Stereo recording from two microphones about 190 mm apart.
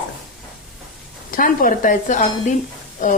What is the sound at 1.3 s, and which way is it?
Speech, 45° left (ahead or behind).